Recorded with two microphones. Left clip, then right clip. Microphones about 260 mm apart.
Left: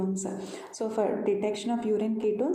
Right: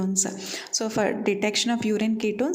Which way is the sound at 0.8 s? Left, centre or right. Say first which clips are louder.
Right 2 dB; right.